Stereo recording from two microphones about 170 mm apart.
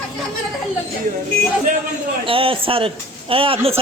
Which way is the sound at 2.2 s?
30° right (ahead or behind).